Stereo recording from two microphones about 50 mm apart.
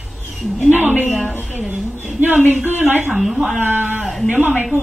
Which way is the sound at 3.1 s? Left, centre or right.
Centre.